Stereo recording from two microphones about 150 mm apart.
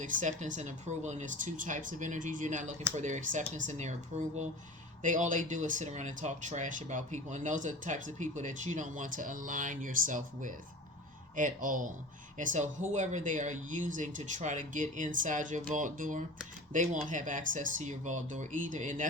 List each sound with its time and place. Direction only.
0.0 s speech: 55° right (ahead or behind)